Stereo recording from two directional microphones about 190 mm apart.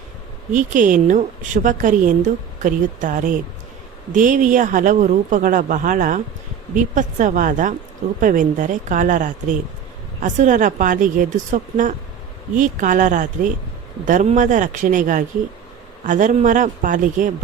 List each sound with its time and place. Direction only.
0.5 s speech: 45° right (ahead or behind)